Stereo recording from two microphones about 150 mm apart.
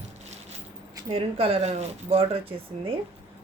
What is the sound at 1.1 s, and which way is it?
A woman's voice, 40° right (ahead or behind).